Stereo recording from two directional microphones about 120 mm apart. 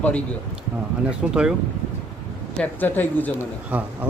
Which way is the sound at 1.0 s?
10° right (ahead or behind).